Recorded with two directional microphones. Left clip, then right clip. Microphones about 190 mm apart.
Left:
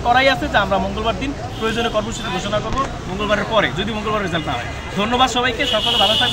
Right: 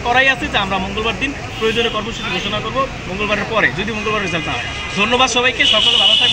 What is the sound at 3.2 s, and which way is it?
A man's voice, 5° left (ahead or behind).